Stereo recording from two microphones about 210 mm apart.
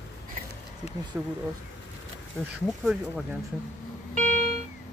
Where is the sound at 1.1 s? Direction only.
5° right (ahead or behind).